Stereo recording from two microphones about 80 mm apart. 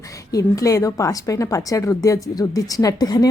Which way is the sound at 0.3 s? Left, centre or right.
Left.